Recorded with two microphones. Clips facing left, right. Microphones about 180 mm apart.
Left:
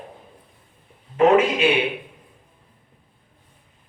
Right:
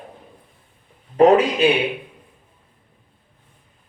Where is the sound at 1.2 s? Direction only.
35° right (ahead or behind).